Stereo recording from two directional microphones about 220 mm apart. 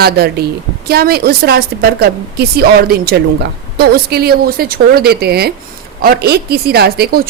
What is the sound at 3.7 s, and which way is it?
A woman's voice, 45° right (ahead or behind).